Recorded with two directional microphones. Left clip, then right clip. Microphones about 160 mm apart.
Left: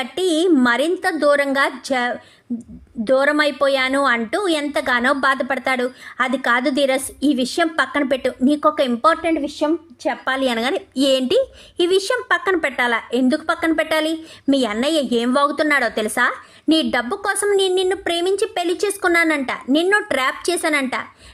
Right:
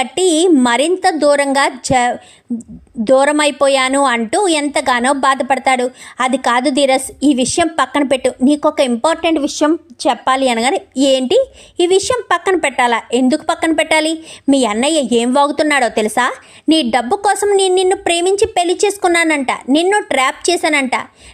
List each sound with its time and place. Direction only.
0.0 s a woman's voice: 15° right (ahead or behind)
9.3 s a woman's voice: 40° right (ahead or behind)
10.2 s a woman's voice: 15° right (ahead or behind)